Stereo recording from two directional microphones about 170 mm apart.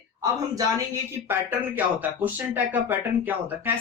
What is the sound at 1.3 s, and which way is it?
Speech, 10° right (ahead or behind).